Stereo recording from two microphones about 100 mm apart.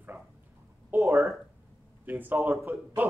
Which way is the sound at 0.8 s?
25° right (ahead or behind).